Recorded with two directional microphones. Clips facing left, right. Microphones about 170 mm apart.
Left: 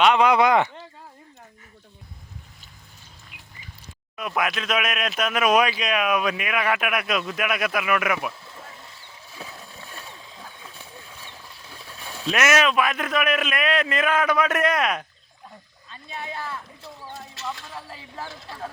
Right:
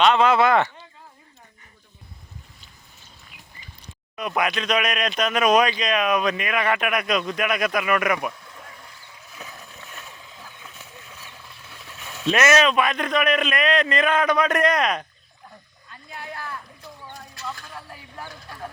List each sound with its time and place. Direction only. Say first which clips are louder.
0.0 s speech: even; 15° left (ahead or behind)
4.2 s speech: right 2 dB; centre (ahead or behind)
8.4 s boat: left 1 dB; 25° left (ahead or behind)
11.2 s a sound: left 1 dB; 30° left (ahead or behind)
12.2 s speech: right 2 dB; 5° left (ahead or behind)
15.9 s a sound: left 2 dB; 25° left (ahead or behind)